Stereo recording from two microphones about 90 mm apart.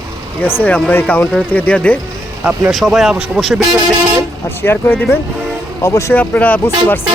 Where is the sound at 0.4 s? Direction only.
20° left (ahead or behind).